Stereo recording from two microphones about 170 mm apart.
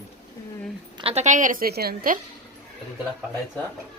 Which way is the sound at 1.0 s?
35° right (ahead or behind).